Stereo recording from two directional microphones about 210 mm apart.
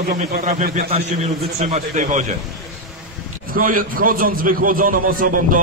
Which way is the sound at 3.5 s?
40° right (ahead or behind).